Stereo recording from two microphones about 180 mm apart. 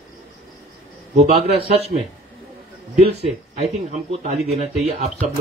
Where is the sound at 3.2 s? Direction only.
35° right (ahead or behind).